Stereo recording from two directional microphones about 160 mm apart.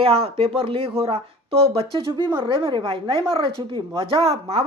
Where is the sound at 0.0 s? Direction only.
40° right (ahead or behind).